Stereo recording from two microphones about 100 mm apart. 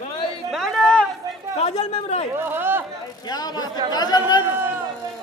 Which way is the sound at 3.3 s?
45° left (ahead or behind).